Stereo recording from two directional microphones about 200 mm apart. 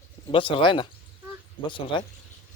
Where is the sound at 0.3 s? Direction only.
25° left (ahead or behind).